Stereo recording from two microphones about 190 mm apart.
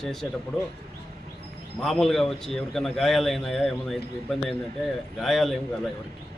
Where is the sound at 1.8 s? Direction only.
Centre (ahead or behind).